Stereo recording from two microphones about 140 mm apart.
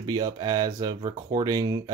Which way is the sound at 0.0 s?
30° right (ahead or behind).